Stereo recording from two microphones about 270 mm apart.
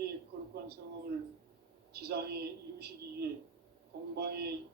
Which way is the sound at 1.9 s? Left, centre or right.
Right.